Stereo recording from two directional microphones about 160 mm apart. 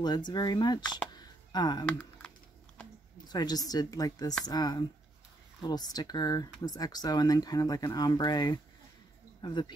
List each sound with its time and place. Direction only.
0.0 s speech: 25° left (ahead or behind)
1.1 s music: 25° left (ahead or behind)
1.9 s typing: 5° left (ahead or behind)
3.3 s speech: 25° left (ahead or behind)